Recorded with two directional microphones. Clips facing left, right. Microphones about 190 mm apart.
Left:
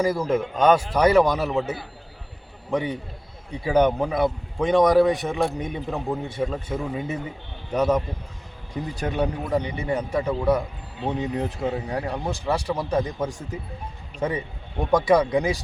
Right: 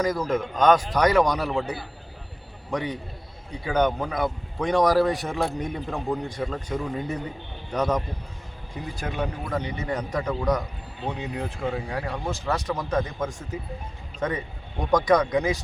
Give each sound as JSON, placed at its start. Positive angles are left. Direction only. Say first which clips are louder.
{"t": 0.0, "sound": "a man's voice", "louder": "left 2 dB", "side_deg": 10}
{"t": 2.6, "sound": "a man's voice", "louder": "left 3 dB", "side_deg": 5}
{"t": 9.0, "sound": "a man's voice", "louder": "left 5 dB", "side_deg": 35}
{"t": 9.5, "sound": "a man's voice", "louder": "left 4 dB", "side_deg": 10}
{"t": 11.1, "sound": "a man's voice", "louder": "left 6 dB", "side_deg": 20}